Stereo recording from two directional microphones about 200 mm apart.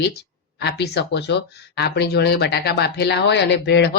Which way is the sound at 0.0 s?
55° left (ahead or behind).